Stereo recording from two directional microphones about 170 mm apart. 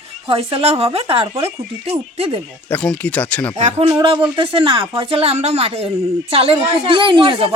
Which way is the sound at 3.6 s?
35° right (ahead or behind).